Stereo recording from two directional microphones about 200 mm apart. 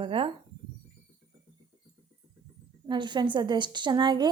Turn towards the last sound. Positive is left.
turn(degrees=-20)  # may be behind; listen again after turning